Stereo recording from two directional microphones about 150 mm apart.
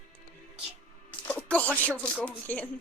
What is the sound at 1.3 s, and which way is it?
Speech, 10° left (ahead or behind).